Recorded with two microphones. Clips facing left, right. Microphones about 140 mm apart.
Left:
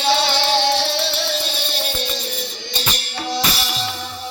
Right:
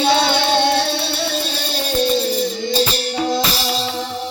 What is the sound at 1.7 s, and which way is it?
Music, 35° right (ahead or behind).